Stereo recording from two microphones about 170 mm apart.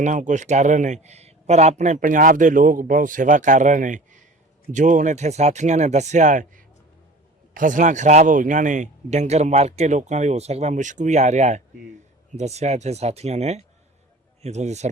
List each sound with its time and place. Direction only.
0.0 s speech: 45° right (ahead or behind)